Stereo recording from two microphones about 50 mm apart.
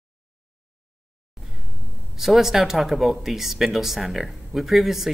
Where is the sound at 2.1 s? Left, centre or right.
Centre.